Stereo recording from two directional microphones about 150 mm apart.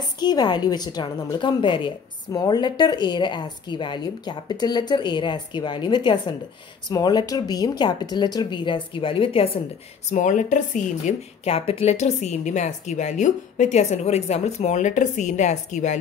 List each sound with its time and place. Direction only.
0.0 s a woman's voice: 25° left (ahead or behind)
10.0 s speech: 55° left (ahead or behind)
11.4 s a woman's voice: 40° left (ahead or behind)